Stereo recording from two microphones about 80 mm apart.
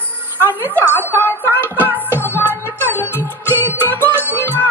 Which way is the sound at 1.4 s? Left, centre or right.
Right.